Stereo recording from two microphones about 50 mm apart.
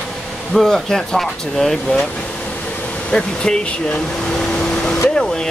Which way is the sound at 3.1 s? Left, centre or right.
Centre.